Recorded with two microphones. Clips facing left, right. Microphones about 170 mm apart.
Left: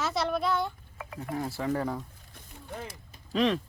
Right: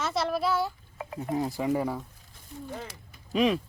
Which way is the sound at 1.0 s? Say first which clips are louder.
Right 5 dB; 25° right (ahead or behind).